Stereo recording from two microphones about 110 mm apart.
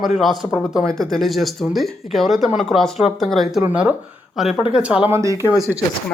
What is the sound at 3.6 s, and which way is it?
Speech, 10° right (ahead or behind).